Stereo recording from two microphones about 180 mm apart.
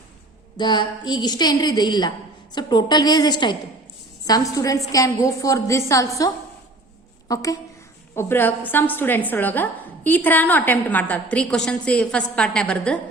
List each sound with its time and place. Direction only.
0.5 s a woman's voice: 25° left (ahead or behind); by 13.0 s 5° left (ahead or behind)